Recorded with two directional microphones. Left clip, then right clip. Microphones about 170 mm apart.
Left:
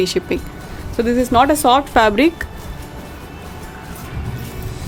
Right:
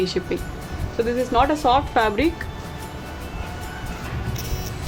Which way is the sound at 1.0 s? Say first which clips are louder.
Left 5 dB; 75° left (ahead or behind).